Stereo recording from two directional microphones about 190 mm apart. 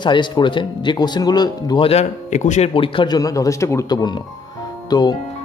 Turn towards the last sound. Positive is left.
turn(degrees=20)  # may be behind; listen again after turning